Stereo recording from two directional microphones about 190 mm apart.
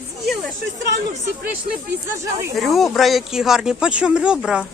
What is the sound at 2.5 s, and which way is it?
Speech, centre (ahead or behind).